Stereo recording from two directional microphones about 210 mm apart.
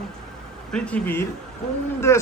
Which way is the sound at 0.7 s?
5° left (ahead or behind).